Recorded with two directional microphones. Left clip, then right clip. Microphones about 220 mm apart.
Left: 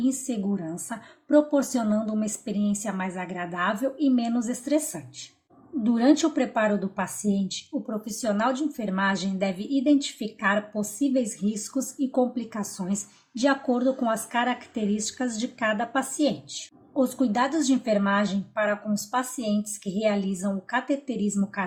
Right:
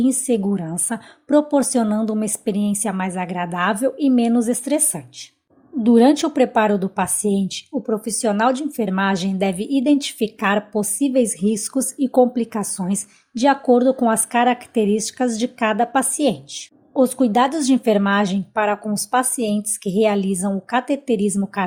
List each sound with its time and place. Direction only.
0.0 s a woman's voice: 40° right (ahead or behind)